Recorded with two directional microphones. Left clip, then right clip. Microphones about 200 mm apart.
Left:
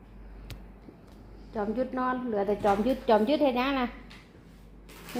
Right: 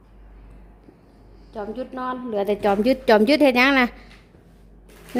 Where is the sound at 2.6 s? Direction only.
55° right (ahead or behind).